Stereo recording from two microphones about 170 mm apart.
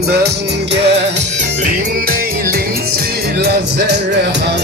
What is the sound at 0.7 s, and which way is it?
Music, 90° right.